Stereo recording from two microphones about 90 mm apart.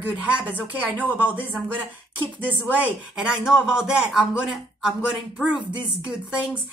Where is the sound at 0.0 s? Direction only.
15° right (ahead or behind).